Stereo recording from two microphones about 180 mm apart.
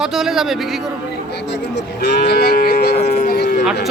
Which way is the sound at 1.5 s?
70° left (ahead or behind).